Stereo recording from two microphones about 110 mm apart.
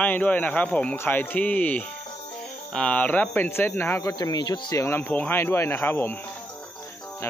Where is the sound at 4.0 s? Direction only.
35° left (ahead or behind).